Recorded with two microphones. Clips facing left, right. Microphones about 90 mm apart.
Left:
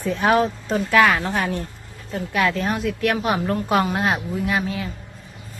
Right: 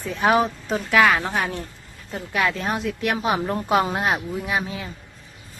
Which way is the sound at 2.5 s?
20° right (ahead or behind).